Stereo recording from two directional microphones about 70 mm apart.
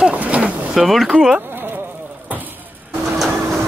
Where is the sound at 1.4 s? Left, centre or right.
Right.